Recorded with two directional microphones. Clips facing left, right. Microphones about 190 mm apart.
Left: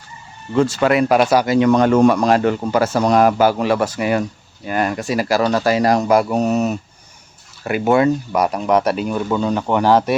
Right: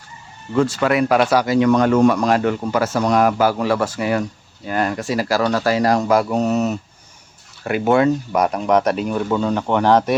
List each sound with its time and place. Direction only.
0.5 s a man's voice: 25° left (ahead or behind)
1.5 s a man's voice: 30° left (ahead or behind); by 10.2 s 5° left (ahead or behind)